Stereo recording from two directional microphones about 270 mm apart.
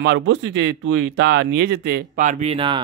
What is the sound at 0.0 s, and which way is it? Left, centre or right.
Speech, right.